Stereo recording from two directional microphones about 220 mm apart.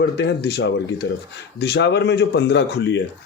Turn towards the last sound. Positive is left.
turn(degrees=50)  # may be behind; listen again after turning